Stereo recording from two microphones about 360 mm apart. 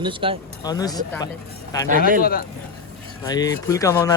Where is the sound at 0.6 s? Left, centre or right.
Centre.